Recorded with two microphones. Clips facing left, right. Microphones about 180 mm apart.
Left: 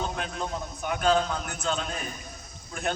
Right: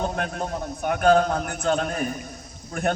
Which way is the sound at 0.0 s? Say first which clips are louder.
Right 5 dB; 50° right (ahead or behind).